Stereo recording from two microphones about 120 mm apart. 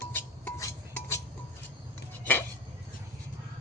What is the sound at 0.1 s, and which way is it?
Music, 20° left (ahead or behind).